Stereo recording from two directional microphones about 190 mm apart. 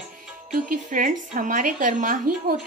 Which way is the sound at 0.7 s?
45° right (ahead or behind).